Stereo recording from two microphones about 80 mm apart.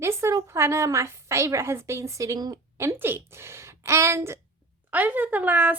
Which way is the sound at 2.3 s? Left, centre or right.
Right.